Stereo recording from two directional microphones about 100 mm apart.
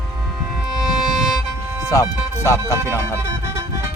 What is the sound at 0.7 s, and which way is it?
Music, 5° right (ahead or behind).